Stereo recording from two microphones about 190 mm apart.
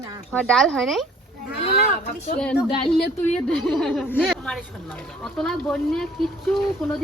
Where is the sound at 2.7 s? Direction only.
25° left (ahead or behind).